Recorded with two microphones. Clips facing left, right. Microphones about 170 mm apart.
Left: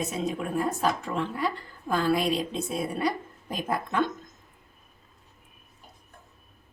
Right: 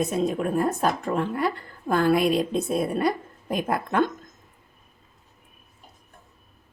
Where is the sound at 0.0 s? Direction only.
55° right (ahead or behind).